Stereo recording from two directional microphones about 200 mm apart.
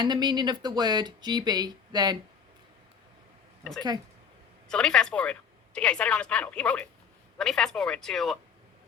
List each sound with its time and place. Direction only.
0.0 s speech: 20° right (ahead or behind)
3.6 s speech: centre (ahead or behind)